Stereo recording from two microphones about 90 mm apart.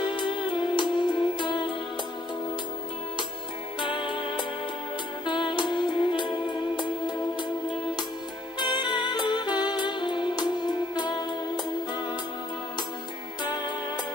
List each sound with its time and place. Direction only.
0.0 s music: 65° left (ahead or behind)
3.8 s music: 65° left (ahead or behind)
8.5 s music: 55° left (ahead or behind)